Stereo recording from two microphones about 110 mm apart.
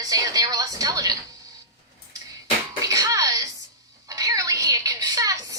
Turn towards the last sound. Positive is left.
turn(degrees=-30)  # may be behind; listen again after turning